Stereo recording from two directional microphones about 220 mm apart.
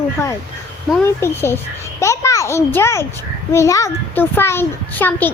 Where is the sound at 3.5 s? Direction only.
15° left (ahead or behind).